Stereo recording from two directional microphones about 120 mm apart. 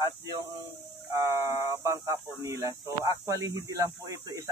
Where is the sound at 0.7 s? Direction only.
25° right (ahead or behind).